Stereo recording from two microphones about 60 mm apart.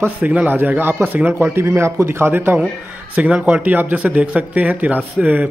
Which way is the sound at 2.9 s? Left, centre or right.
Right.